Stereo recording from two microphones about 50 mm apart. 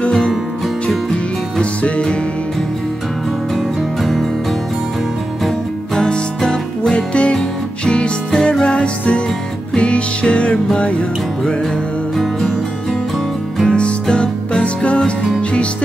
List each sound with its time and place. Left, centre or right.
0.8 s music: left
5.9 s music: centre
13.7 s music: centre